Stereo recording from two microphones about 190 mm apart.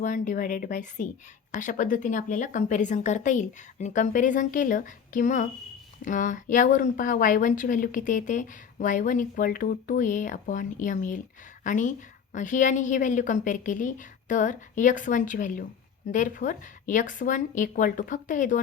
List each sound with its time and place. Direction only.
0.0 s a woman's voice: 40° left (ahead or behind)